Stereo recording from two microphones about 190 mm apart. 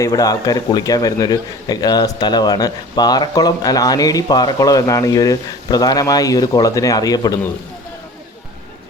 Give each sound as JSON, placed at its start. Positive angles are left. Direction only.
{"t": 0.0, "sound": "speech", "side_deg": 20}